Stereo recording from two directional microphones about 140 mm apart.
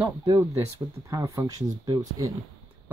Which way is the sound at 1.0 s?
25° right (ahead or behind).